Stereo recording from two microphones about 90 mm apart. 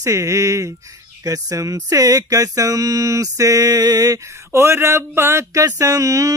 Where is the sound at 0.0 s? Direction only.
35° right (ahead or behind).